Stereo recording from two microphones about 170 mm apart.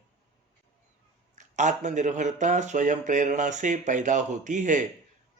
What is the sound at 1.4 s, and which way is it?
Speech, 45° right (ahead or behind).